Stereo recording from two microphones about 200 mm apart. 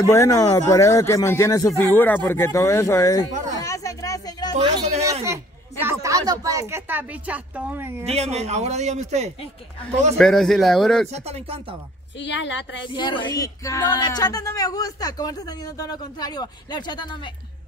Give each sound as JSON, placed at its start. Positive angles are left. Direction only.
{"t": 0.0, "sound": "speech", "side_deg": 15}
{"t": 3.6, "sound": "a sound", "side_deg": 15}
{"t": 5.2, "sound": "a woman's voice", "side_deg": -15}
{"t": 8.0, "sound": "speech", "side_deg": -30}
{"t": 10.1, "sound": "speech", "side_deg": 0}
{"t": 11.1, "sound": "speech", "side_deg": -30}
{"t": 12.2, "sound": "a woman's voice", "side_deg": 65}
{"t": 12.8, "sound": "speech", "side_deg": 25}